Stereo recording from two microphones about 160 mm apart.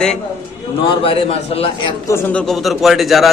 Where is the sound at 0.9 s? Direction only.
35° left (ahead or behind).